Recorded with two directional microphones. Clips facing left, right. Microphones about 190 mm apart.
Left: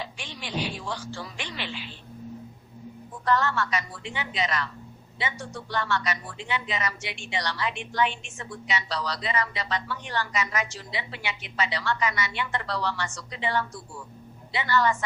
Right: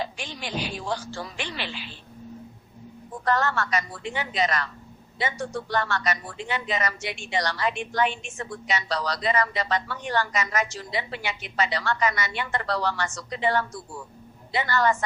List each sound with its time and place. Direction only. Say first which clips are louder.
0.0 s speech: right 5 dB; 45° right (ahead or behind)
3.2 s speech: even; 45° right (ahead or behind)